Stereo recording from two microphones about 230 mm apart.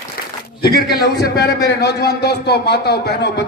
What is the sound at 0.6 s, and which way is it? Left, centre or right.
A man's voice, left.